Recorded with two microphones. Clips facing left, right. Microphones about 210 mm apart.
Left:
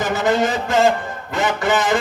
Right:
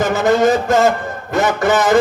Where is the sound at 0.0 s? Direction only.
45° right (ahead or behind).